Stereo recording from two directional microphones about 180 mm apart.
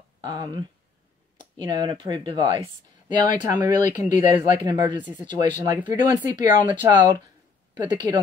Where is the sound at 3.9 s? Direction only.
20° right (ahead or behind).